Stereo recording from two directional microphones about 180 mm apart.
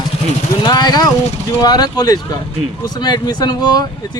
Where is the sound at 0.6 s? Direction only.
25° left (ahead or behind).